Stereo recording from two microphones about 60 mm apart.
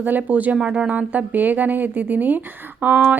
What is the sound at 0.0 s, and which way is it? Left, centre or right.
Speech, right.